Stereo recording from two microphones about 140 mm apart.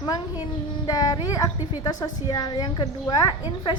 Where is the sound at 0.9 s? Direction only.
25° left (ahead or behind).